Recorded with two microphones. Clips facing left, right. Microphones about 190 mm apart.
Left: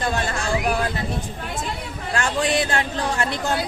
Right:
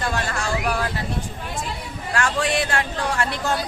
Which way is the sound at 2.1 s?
20° left (ahead or behind).